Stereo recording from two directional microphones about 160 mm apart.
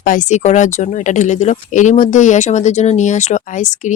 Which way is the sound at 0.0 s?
55° left (ahead or behind).